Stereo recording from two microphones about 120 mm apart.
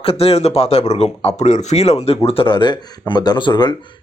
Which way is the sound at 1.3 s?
85° left.